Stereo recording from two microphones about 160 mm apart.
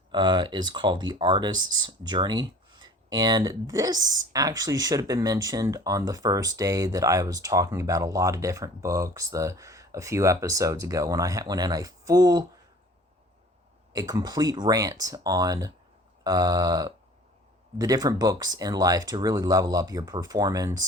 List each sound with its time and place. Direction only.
0.1 s speech: 25° right (ahead or behind)
13.9 s speech: 25° right (ahead or behind)